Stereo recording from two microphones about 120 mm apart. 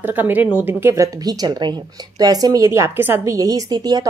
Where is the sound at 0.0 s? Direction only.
15° right (ahead or behind).